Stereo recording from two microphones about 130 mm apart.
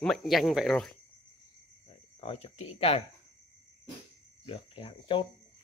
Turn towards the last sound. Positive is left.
turn(degrees=45)  # may be behind; listen again after turning